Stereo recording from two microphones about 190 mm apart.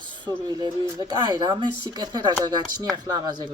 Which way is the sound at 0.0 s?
20° right (ahead or behind).